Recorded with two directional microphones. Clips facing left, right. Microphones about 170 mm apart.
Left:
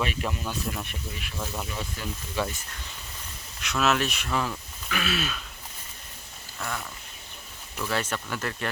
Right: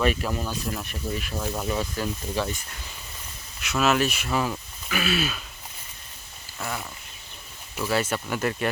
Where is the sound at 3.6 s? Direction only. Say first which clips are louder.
Right 3 dB; 5° right (ahead or behind).